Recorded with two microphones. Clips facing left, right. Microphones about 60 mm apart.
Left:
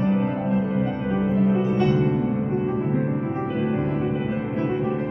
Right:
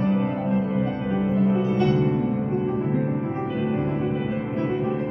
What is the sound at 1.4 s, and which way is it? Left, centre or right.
Music, left.